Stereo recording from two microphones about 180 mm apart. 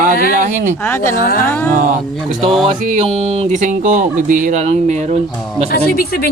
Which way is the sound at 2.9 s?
35° right (ahead or behind).